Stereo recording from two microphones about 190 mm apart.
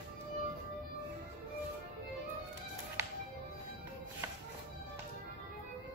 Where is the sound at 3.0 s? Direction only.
15° right (ahead or behind).